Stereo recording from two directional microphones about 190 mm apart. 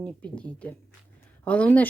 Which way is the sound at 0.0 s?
5° left (ahead or behind).